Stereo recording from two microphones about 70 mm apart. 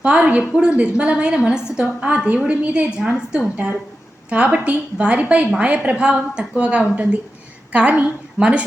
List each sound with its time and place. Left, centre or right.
0.0 s a woman's voice: centre